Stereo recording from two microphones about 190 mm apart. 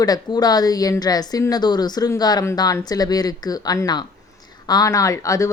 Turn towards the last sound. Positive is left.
turn(degrees=15)  # may be behind; listen again after turning